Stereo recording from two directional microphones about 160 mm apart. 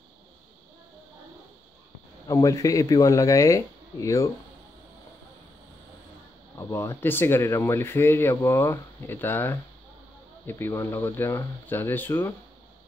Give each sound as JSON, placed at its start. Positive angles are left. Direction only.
{"t": 2.2, "sound": "speech", "side_deg": 20}
{"t": 6.6, "sound": "speech", "side_deg": 15}